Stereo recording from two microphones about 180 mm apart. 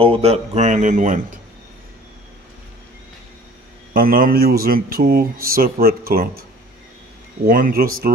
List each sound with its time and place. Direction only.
0.0 s speech: 35° right (ahead or behind)
3.9 s speech: 50° right (ahead or behind)
7.4 s speech: 50° right (ahead or behind)